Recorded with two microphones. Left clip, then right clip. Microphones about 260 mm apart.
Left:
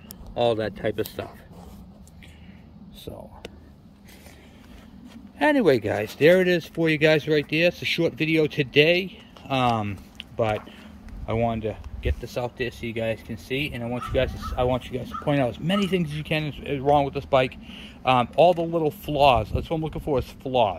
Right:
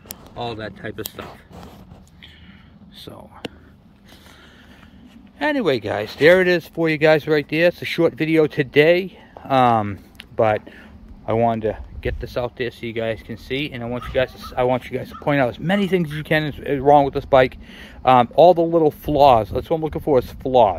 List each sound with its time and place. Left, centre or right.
0.4 s speech: centre
5.4 s speech: centre
6.8 s speech: centre